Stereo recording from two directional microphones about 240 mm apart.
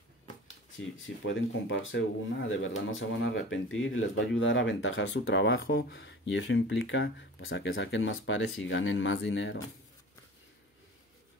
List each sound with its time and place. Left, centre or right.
0.7 s speech: left